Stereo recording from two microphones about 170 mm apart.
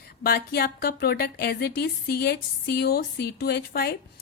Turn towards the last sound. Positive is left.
turn(degrees=65)  # may be behind; listen again after turning